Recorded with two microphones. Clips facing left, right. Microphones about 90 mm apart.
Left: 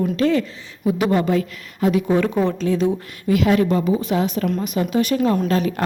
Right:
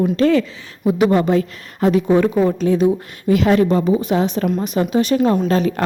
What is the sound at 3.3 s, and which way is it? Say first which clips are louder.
A woman's voice: right 3 dB; 35° right (ahead or behind).